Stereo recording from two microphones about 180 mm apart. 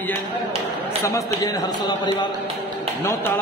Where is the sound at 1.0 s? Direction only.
15° left (ahead or behind).